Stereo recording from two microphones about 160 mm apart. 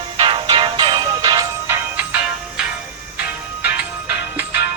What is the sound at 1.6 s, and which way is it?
Music, 15° right (ahead or behind).